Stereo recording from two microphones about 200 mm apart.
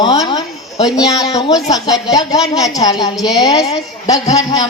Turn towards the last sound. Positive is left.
turn(degrees=20)  # may be behind; listen again after turning